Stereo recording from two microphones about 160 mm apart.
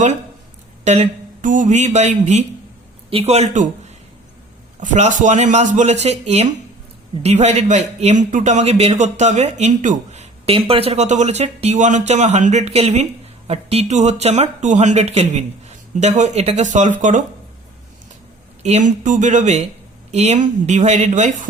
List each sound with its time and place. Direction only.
0.9 s a man's voice: 50° right (ahead or behind)
18.6 s a man's voice: 50° right (ahead or behind)